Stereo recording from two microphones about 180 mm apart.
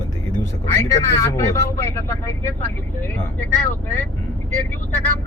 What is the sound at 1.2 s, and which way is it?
Speech, 15° left (ahead or behind).